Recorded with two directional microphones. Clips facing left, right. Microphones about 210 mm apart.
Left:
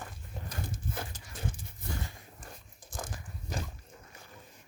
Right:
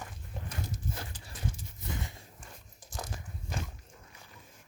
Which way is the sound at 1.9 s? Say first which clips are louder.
Even; 20° right (ahead or behind).